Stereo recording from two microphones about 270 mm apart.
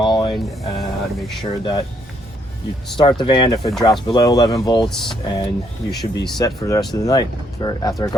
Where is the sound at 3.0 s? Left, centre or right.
Centre.